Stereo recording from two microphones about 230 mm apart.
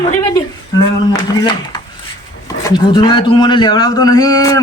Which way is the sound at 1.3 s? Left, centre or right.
Centre.